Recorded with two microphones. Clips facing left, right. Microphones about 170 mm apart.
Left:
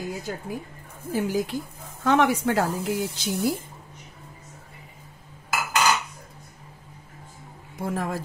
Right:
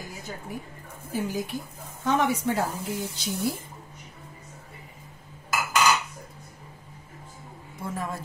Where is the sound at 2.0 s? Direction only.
90° left.